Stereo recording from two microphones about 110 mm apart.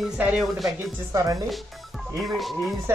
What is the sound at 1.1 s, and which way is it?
Speech, 35° right (ahead or behind).